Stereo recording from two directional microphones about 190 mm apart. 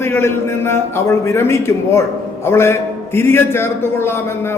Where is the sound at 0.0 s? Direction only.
10° left (ahead or behind).